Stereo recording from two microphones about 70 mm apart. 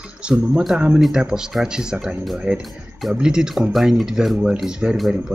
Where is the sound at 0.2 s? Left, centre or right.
Centre.